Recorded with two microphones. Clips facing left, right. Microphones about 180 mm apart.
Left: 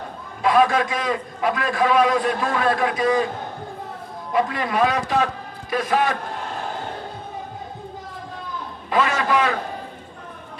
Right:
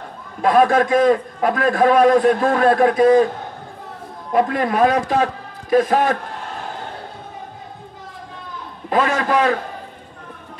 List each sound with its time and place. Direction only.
0.4 s a man's voice: 50° right (ahead or behind)
4.3 s a man's voice: 50° right (ahead or behind)
8.9 s a man's voice: 40° right (ahead or behind)